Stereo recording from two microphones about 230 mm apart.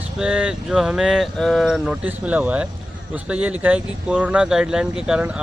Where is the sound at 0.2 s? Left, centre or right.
Centre.